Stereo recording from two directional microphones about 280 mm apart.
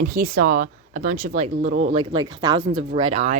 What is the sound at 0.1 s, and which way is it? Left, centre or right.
Speech, right.